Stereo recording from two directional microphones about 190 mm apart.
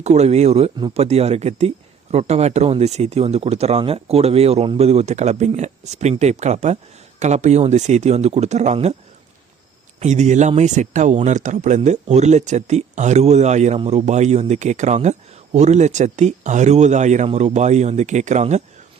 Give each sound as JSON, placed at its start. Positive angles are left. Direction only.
{"t": 0.0, "sound": "a man's voice", "side_deg": -35}
{"t": 10.0, "sound": "a man's voice", "side_deg": -40}